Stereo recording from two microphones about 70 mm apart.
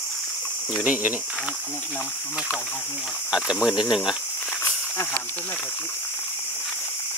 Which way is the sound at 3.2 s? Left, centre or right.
Centre.